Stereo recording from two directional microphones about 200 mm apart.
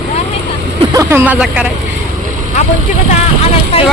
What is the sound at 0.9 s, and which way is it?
Speech, 10° right (ahead or behind).